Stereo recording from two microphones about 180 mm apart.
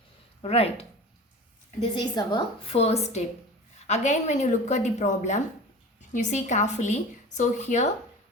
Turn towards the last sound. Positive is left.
turn(degrees=40)  # may be behind; listen again after turning